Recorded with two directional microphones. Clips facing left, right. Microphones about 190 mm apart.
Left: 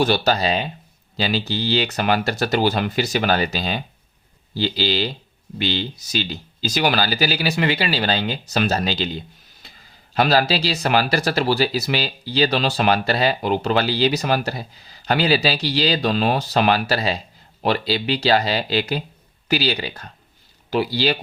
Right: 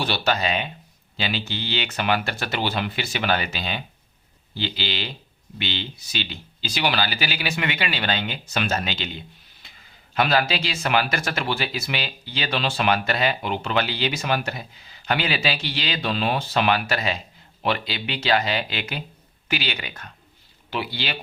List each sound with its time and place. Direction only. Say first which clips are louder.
0.0 s speech: left 5 dB; 40° left (ahead or behind)